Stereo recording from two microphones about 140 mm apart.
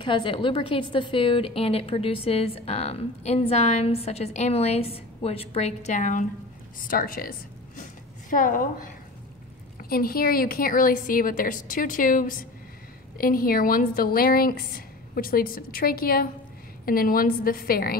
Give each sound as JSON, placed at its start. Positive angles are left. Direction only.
{"t": 0.0, "sound": "a woman's voice", "side_deg": 35}
{"t": 6.8, "sound": "a woman's voice", "side_deg": 90}
{"t": 9.8, "sound": "a woman's voice", "side_deg": 90}
{"t": 13.2, "sound": "a woman's voice", "side_deg": 90}